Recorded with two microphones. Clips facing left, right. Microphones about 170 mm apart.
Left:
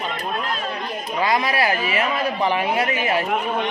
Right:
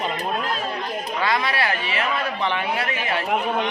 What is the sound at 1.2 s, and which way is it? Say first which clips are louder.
A man's voice: left 3 dB; 25° left (ahead or behind).